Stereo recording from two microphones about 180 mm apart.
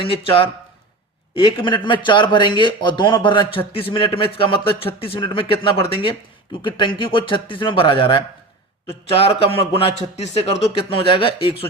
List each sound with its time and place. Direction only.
0.0 s speech: 30° left (ahead or behind)